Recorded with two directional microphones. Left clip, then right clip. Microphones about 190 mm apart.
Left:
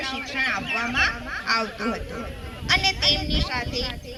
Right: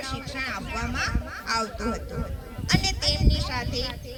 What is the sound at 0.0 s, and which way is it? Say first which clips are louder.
Speech: left 6 dB; 45° right (ahead or behind).